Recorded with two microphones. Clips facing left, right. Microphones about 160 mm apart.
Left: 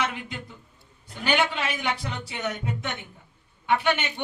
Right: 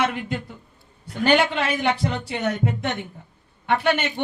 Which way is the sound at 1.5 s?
50° right (ahead or behind).